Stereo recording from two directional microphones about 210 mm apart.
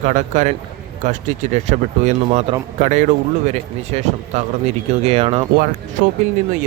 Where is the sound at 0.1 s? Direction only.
35° right (ahead or behind).